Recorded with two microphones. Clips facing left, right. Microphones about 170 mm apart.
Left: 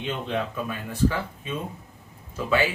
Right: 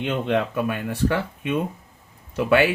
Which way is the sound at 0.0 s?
65° right (ahead or behind).